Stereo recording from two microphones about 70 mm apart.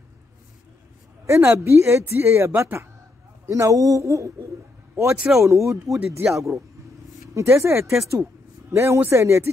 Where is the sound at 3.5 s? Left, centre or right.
Right.